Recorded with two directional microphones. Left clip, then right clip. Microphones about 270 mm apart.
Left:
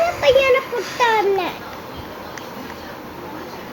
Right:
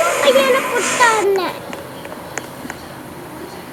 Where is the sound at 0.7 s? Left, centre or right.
Right.